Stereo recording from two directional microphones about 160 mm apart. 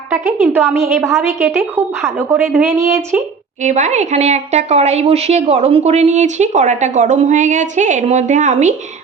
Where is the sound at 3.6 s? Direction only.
45° right (ahead or behind).